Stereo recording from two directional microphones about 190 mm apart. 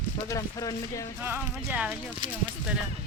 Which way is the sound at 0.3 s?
15° left (ahead or behind).